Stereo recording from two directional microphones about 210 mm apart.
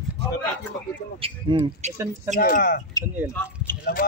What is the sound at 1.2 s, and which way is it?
Speech, 25° right (ahead or behind).